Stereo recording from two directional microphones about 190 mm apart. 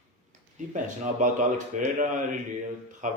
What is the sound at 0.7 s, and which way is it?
Speech, 40° right (ahead or behind).